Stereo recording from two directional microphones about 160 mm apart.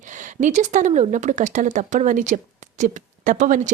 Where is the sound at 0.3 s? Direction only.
50° right (ahead or behind).